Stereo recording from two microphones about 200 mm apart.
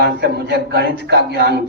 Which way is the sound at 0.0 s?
55° right (ahead or behind).